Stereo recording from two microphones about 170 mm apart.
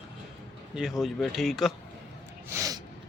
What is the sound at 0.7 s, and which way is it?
Speech, centre (ahead or behind).